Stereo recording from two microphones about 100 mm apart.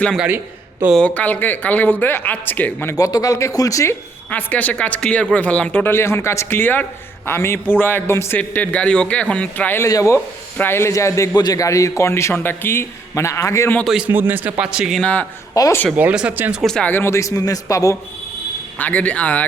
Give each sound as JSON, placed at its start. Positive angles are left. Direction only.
{"t": 0.9, "sound": "speech", "side_deg": 15}
{"t": 3.0, "sound": "a man's voice", "side_deg": 35}
{"t": 4.3, "sound": "a man's voice", "side_deg": 15}
{"t": 9.8, "sound": "a man's voice", "side_deg": 30}
{"t": 13.8, "sound": "speech", "side_deg": -5}
{"t": 14.1, "sound": "a man's voice", "side_deg": -20}
{"t": 14.6, "sound": "speech", "side_deg": -10}
{"t": 15.0, "sound": "speech", "side_deg": 15}
{"t": 15.6, "sound": "a man's voice", "side_deg": 40}
{"t": 16.0, "sound": "speech", "side_deg": -15}
{"t": 16.6, "sound": "speech", "side_deg": 5}
{"t": 16.9, "sound": "a man's voice", "side_deg": 25}
{"t": 18.8, "sound": "speech", "side_deg": 15}